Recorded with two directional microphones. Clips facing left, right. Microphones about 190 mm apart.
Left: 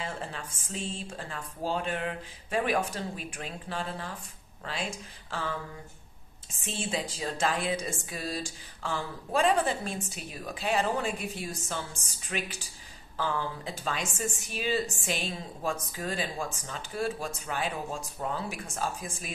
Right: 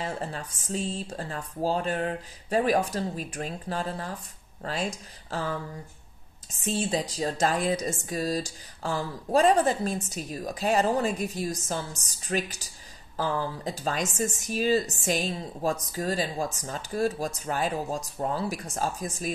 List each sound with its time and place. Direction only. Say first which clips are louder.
0.0 s speech: right 4 dB; 40° right (ahead or behind)
6.6 s speech: right 6 dB; 40° right (ahead or behind)